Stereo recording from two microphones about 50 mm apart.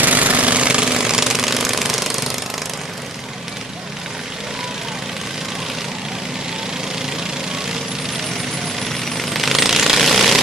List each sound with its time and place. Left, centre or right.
0.0 s jackhammer: right; by 2.3 s centre
9.1 s jackhammer: centre